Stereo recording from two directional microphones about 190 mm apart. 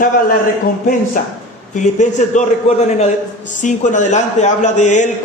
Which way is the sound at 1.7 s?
40° left (ahead or behind).